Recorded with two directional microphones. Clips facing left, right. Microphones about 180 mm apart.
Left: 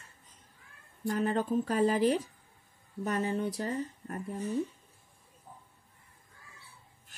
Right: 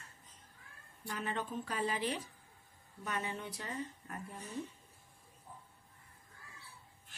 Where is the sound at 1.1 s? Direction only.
40° left (ahead or behind).